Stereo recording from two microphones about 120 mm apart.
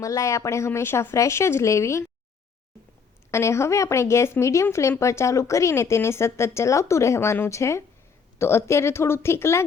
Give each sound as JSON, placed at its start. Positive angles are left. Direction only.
{"t": 0.0, "sound": "speech", "side_deg": 25}
{"t": 3.3, "sound": "speech", "side_deg": 25}